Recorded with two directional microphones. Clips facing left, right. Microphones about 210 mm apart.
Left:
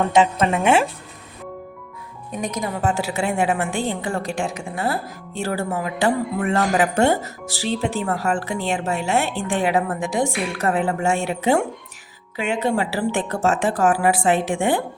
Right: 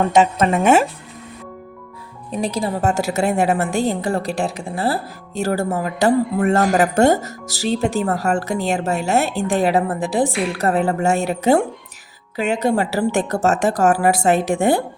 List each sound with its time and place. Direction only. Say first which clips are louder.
0.1 s a woman's voice: right 2 dB; 45° right (ahead or behind)
2.3 s a woman's voice: right 4 dB; 30° right (ahead or behind)
2.8 s a woman's voice: right 3 dB; 45° right (ahead or behind)